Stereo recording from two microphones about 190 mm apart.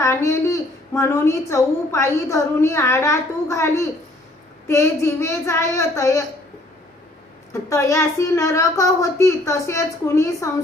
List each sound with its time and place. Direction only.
0.0 s a woman's voice: 15° left (ahead or behind)
7.5 s a woman's voice: 15° left (ahead or behind)